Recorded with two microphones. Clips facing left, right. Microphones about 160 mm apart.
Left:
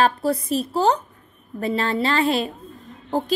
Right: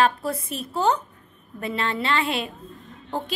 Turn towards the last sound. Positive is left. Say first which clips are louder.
# left 7 dB
turn(degrees=40)  # may be behind; listen again after turning